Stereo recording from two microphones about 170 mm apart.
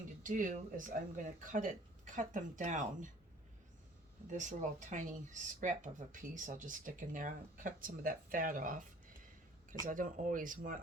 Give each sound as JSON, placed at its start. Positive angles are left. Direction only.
{"t": 0.2, "sound": "speech", "side_deg": -50}
{"t": 4.3, "sound": "speech", "side_deg": -45}